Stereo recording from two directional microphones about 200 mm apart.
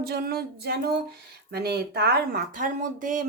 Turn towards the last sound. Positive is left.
turn(degrees=-40)  # may be behind; listen again after turning